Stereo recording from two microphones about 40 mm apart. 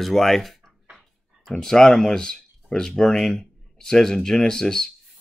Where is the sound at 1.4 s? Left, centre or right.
Centre.